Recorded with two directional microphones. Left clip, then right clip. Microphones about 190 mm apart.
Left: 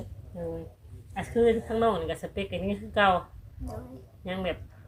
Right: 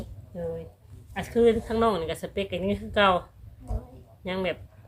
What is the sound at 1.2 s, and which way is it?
Speech, 45° right (ahead or behind).